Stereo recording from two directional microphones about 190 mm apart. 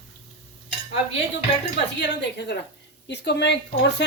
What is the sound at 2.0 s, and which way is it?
A woman's voice, 65° left (ahead or behind).